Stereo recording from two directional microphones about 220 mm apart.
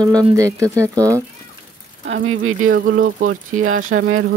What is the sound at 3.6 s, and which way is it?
Speech, 70° right (ahead or behind).